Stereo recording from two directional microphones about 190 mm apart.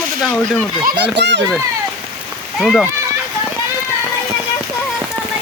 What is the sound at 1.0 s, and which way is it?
Speech, 65° right (ahead or behind).